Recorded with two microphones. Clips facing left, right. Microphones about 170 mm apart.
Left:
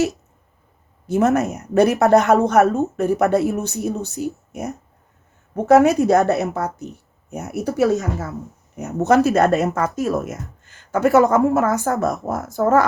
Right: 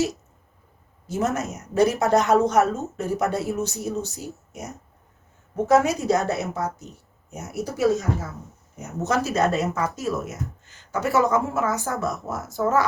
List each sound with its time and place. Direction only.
1.0 s speech: 60° left (ahead or behind)
5.6 s speech: 65° left (ahead or behind)